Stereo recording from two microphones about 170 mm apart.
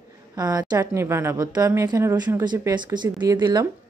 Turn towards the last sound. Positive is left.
turn(degrees=-25)  # may be behind; listen again after turning